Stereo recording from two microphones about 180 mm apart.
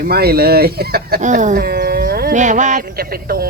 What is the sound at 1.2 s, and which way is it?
Speech, 45° right (ahead or behind).